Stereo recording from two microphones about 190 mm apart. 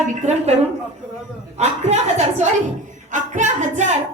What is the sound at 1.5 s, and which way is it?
Speech, 35° right (ahead or behind).